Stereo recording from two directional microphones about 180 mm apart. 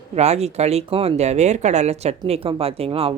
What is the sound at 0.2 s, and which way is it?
Speech, 35° right (ahead or behind).